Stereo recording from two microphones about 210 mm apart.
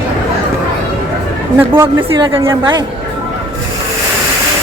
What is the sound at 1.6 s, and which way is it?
A woman's voice, 10° right (ahead or behind).